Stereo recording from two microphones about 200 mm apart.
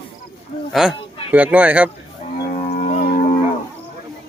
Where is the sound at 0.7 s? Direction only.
5° right (ahead or behind).